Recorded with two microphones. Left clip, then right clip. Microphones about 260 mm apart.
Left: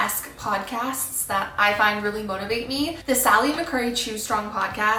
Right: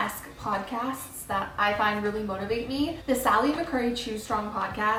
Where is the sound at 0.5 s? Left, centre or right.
Centre.